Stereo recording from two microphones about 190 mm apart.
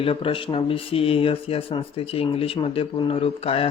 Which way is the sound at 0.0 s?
30° left (ahead or behind).